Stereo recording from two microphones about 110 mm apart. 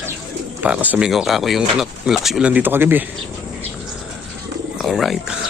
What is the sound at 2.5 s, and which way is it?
Speech, 15° right (ahead or behind).